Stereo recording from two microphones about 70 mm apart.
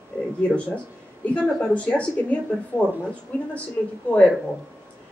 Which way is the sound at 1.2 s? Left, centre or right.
Left.